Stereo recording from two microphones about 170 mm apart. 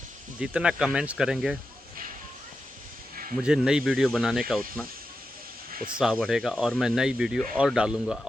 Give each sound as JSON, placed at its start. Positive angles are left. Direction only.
{"t": 0.3, "sound": "speech", "side_deg": -5}
{"t": 3.4, "sound": "speech", "side_deg": -5}
{"t": 5.7, "sound": "speech", "side_deg": -55}
{"t": 6.0, "sound": "speech", "side_deg": 0}